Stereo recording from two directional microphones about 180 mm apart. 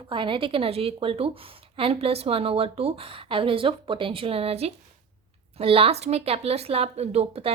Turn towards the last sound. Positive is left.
turn(degrees=-35)  # may be behind; listen again after turning